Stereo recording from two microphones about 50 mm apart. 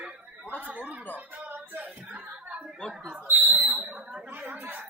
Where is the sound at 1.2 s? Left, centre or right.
Right.